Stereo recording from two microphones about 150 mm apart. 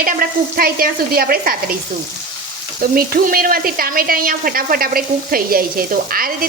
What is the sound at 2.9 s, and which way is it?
A woman's voice, 75° right (ahead or behind).